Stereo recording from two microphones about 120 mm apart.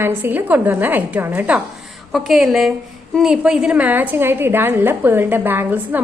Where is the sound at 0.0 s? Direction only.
15° right (ahead or behind).